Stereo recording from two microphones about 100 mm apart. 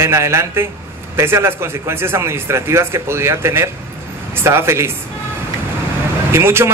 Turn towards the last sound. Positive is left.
turn(degrees=-25)  # may be behind; listen again after turning